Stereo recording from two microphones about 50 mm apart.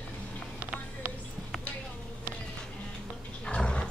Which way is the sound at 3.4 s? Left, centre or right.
Centre.